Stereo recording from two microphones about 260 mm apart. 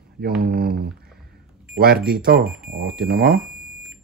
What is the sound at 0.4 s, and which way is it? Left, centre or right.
Speech, right.